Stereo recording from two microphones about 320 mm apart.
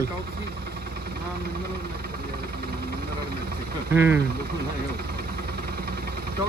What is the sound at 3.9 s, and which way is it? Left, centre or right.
Speech, centre.